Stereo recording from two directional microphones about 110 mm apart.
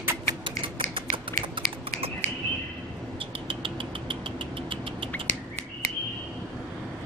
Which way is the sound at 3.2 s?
50° right (ahead or behind).